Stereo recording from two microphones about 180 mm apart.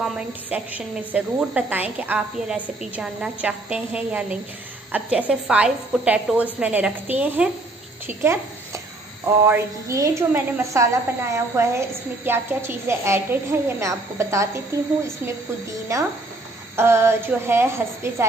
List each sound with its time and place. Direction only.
0.0 s a woman's voice: 5° right (ahead or behind)
8.1 s a sound: 15° right (ahead or behind)
9.4 s a woman's voice: 15° right (ahead or behind)
15.9 s a woman's voice: 15° right (ahead or behind)